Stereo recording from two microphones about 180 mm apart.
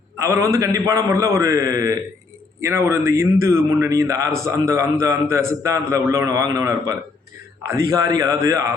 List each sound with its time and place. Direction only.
0.2 s a man's voice: 15° right (ahead or behind)